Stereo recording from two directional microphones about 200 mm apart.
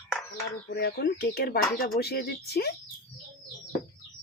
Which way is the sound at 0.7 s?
50° left (ahead or behind).